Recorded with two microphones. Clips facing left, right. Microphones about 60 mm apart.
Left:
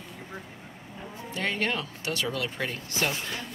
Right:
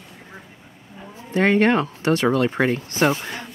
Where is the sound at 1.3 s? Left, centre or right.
Right.